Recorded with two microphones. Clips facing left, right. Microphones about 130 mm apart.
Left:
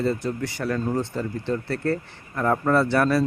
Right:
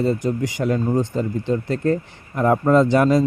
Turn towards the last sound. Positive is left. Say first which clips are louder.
# right 5 dB
turn(degrees=-15)  # may be behind; listen again after turning